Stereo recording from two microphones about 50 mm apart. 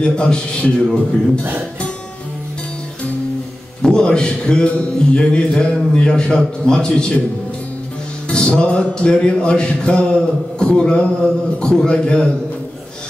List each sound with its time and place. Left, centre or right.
0.0 s a man's voice: centre
3.8 s music: centre
8.3 s music: centre